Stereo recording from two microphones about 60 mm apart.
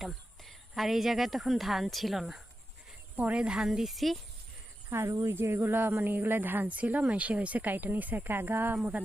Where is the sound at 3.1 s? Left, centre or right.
Right.